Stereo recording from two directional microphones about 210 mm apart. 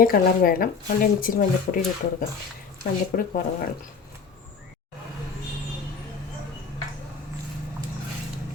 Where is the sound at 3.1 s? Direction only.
40° left (ahead or behind).